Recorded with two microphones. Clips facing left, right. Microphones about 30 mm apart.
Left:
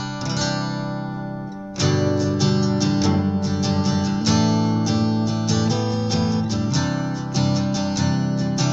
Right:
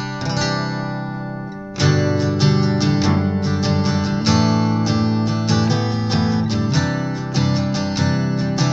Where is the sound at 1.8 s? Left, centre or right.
Right.